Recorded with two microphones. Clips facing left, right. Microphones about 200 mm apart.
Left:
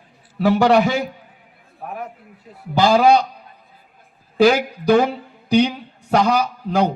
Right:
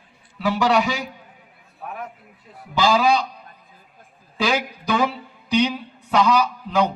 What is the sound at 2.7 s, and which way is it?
Speech, 55° left (ahead or behind).